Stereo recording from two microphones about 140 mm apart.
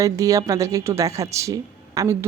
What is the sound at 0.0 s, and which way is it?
Speech, 25° right (ahead or behind).